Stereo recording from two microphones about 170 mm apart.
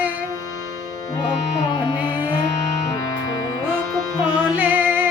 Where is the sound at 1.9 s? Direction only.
25° left (ahead or behind).